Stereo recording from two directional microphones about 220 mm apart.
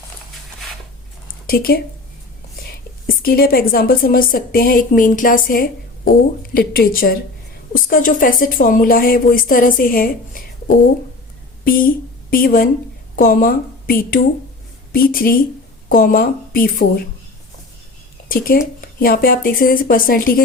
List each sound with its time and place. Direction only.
1.5 s a woman's voice: 40° left (ahead or behind)
18.3 s speech: 40° left (ahead or behind)